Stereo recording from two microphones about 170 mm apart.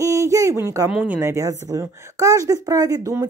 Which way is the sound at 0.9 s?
10° right (ahead or behind).